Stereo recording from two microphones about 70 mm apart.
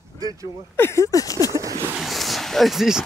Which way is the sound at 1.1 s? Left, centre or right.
Left.